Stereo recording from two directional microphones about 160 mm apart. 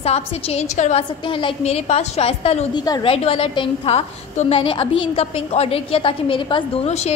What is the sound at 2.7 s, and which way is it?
A woman's voice, 25° left (ahead or behind).